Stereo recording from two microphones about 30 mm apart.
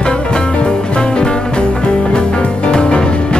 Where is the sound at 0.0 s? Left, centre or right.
Left.